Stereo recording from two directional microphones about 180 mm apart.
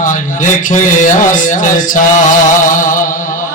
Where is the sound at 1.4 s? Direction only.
45° left (ahead or behind).